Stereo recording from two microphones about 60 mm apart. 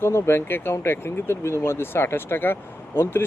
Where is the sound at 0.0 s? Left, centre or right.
Left.